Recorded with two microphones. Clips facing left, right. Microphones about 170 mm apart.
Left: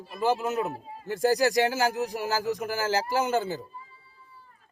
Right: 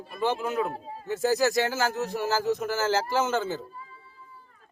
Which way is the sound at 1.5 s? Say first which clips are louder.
Left 2 dB; 10° left (ahead or behind).